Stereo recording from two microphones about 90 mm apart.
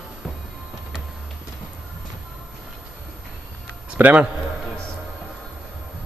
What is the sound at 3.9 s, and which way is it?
Speech, 15° right (ahead or behind).